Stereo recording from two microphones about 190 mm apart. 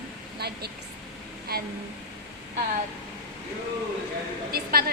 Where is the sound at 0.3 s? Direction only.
60° right (ahead or behind).